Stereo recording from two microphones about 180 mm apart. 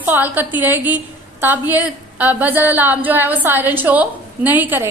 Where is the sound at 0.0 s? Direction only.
10° right (ahead or behind).